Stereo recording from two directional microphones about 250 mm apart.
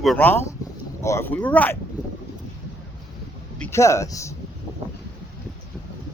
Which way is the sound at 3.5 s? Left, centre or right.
Centre.